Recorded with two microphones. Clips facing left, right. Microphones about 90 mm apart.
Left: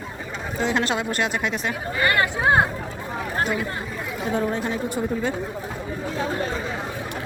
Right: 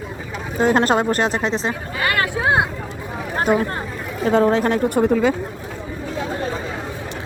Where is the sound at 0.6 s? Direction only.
45° right (ahead or behind); by 1.7 s 30° right (ahead or behind).